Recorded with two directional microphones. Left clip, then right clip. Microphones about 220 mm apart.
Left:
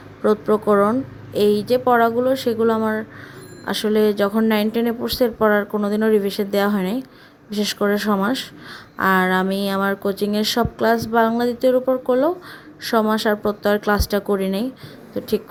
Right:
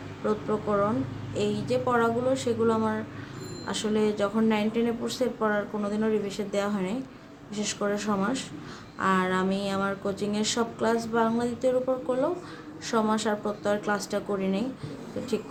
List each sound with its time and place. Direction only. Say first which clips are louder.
0.2 s speech: left 11 dB; 40° left (ahead or behind)